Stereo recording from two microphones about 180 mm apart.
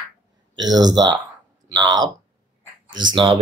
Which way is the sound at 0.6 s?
20° right (ahead or behind).